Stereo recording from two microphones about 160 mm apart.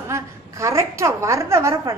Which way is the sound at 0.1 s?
20° right (ahead or behind).